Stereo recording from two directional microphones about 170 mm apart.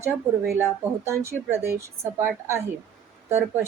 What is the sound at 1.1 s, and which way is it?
A woman's voice, 15° right (ahead or behind).